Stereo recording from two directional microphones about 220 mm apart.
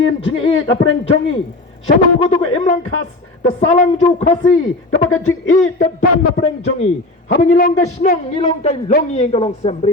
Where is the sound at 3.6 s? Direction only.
35° left (ahead or behind).